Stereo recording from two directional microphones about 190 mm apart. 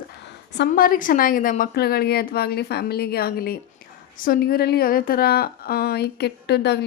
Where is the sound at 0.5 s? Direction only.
55° left (ahead or behind).